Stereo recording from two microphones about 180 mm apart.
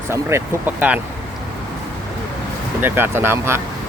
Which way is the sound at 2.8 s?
10° right (ahead or behind).